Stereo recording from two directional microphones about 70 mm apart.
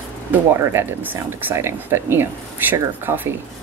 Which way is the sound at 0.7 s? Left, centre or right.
Right.